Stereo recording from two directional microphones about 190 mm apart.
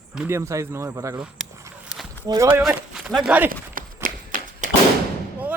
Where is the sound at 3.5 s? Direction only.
45° right (ahead or behind).